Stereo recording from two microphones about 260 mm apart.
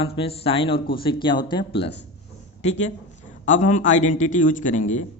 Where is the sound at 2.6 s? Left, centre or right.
Left.